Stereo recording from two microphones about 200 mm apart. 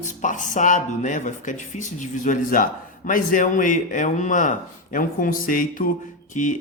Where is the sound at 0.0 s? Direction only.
40° left (ahead or behind).